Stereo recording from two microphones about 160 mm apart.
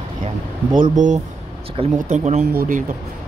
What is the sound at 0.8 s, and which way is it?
Speech, 50° right (ahead or behind).